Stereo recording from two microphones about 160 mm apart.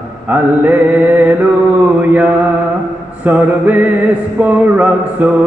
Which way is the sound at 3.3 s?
10° right (ahead or behind).